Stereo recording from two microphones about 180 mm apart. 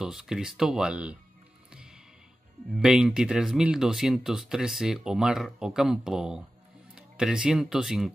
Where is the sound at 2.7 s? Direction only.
5° right (ahead or behind).